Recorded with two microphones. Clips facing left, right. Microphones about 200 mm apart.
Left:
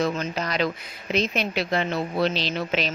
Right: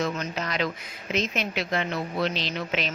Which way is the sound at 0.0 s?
35° left (ahead or behind).